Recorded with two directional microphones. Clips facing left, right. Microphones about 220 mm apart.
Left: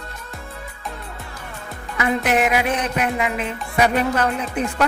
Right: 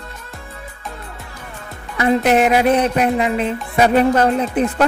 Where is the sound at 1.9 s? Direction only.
35° right (ahead or behind).